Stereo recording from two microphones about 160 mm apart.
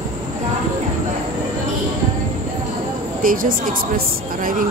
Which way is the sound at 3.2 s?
60° right (ahead or behind).